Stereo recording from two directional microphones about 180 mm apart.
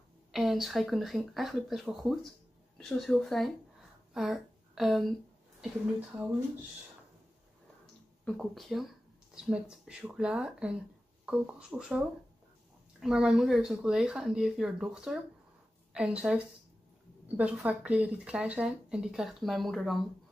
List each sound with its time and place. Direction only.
0.3 s a woman's voice: centre (ahead or behind)
8.3 s speech: centre (ahead or behind)